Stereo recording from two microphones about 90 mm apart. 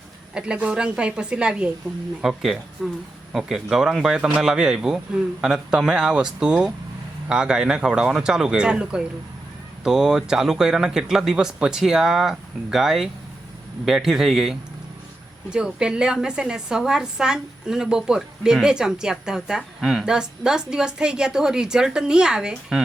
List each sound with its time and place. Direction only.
0.3 s a woman's voice: 10° right (ahead or behind)